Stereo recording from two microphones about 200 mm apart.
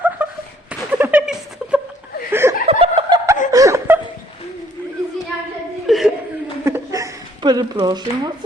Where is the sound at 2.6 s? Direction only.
30° right (ahead or behind).